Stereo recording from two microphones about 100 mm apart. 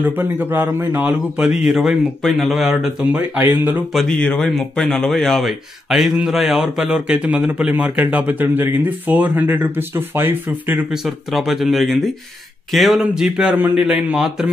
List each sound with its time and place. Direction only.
0.0 s speech: 20° right (ahead or behind); by 3.2 s 5° right (ahead or behind)
3.2 s speech: 20° right (ahead or behind)
3.9 s speech: 5° left (ahead or behind); by 10.9 s 20° right (ahead or behind)
10.9 s speech: centre (ahead or behind)